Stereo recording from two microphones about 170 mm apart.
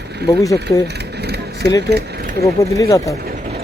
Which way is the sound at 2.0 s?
65° right (ahead or behind).